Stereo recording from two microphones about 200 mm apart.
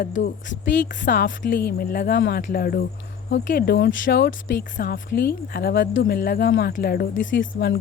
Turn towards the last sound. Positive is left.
turn(degrees=65)  # may be behind; listen again after turning